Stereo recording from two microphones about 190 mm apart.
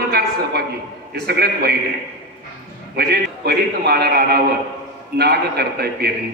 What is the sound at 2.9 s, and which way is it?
A man's voice, 55° right (ahead or behind).